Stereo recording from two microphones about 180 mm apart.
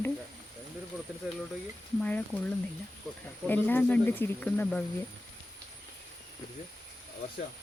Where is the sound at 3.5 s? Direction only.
10° left (ahead or behind).